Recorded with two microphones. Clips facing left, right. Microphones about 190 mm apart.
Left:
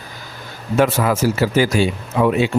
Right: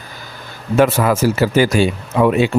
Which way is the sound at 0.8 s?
55° right (ahead or behind).